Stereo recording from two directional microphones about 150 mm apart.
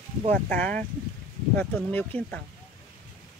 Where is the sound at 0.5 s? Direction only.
60° right (ahead or behind).